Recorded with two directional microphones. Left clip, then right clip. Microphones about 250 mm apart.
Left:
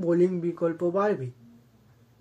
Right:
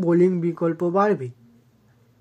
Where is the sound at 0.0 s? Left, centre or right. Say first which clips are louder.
Right 5 dB; right.